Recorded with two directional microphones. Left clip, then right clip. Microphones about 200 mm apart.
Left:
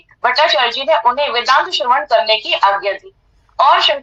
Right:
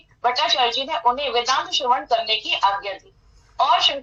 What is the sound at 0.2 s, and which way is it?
A woman's voice, 35° left (ahead or behind).